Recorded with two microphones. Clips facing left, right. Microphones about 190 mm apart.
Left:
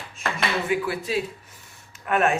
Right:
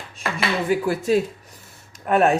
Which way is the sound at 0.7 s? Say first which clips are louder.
Right 10 dB; 45° right (ahead or behind).